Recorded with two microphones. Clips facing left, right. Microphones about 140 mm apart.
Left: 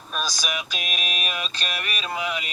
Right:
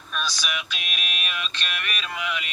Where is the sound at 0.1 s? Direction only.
40° left (ahead or behind).